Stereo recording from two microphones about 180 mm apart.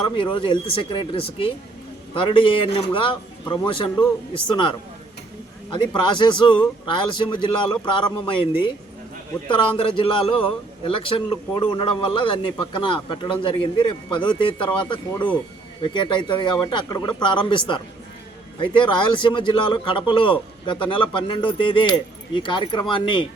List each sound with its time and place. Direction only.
0.2 s a man's voice: 30° left (ahead or behind)
5.7 s a man's voice: 25° left (ahead or behind)